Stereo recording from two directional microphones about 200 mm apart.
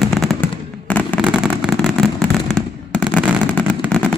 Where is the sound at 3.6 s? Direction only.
5° left (ahead or behind).